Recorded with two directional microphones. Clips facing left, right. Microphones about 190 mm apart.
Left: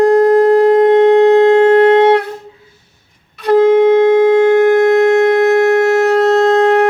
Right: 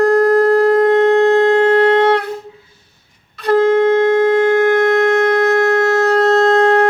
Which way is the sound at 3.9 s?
20° left (ahead or behind).